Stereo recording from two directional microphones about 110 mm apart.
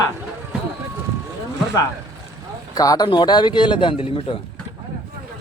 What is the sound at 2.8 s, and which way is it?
Speech, 35° left (ahead or behind).